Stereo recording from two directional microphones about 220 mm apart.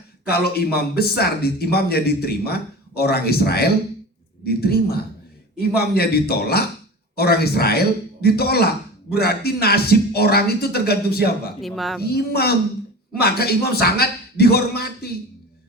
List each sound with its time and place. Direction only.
0.3 s a man's voice: 45° left (ahead or behind)
11.6 s speech: centre (ahead or behind)
12.0 s a man's voice: 45° left (ahead or behind)